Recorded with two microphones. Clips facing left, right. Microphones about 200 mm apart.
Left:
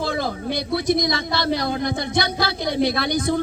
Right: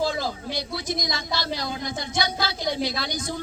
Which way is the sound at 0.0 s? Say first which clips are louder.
Left 2 dB; 60° left (ahead or behind).